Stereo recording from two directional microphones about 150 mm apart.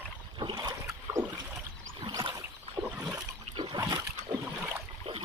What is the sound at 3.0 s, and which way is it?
Water, 15° right (ahead or behind).